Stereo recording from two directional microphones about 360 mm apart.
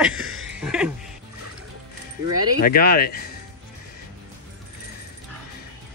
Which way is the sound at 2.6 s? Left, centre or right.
Left.